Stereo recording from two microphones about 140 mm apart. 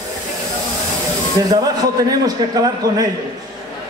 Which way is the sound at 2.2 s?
25° right (ahead or behind).